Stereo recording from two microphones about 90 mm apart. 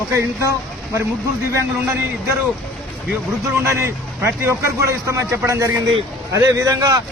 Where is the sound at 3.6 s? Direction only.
30° right (ahead or behind).